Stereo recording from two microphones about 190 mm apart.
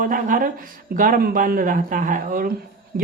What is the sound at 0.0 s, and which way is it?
Speech, 45° right (ahead or behind).